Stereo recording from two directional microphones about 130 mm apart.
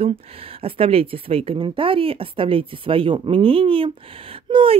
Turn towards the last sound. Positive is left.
turn(degrees=-45)  # may be behind; listen again after turning